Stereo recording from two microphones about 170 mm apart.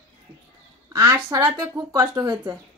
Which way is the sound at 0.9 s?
20° right (ahead or behind).